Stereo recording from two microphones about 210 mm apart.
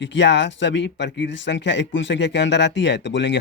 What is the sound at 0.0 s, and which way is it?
Speech, 60° left (ahead or behind).